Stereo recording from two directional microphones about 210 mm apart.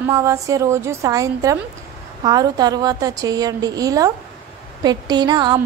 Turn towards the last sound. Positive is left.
turn(degrees=-20)  # may be behind; listen again after turning